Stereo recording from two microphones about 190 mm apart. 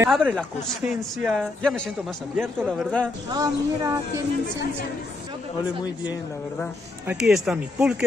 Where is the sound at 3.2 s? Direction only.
20° right (ahead or behind).